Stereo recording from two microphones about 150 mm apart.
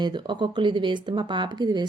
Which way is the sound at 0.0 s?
30° right (ahead or behind).